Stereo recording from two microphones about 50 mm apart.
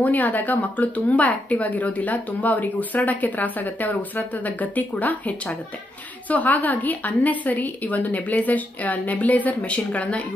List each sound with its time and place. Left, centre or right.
0.0 s a woman's voice: left
6.2 s a woman's voice: left